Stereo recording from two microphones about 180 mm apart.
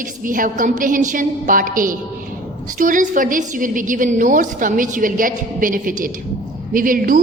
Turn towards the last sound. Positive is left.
turn(degrees=-50)  # may be behind; listen again after turning